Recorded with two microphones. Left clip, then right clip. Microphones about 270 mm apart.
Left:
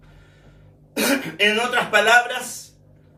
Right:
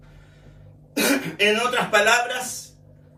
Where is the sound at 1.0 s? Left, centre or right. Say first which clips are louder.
Left 1 dB; centre.